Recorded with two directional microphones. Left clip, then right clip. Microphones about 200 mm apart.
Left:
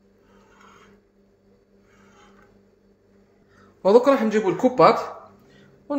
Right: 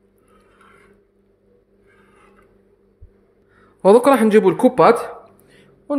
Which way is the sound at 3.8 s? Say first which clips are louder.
Right 4 dB; 45° right (ahead or behind).